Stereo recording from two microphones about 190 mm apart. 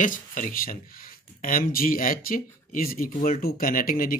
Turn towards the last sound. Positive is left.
turn(degrees=50)  # may be behind; listen again after turning